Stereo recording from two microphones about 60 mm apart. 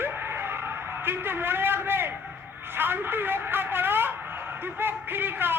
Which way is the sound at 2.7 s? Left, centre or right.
Right.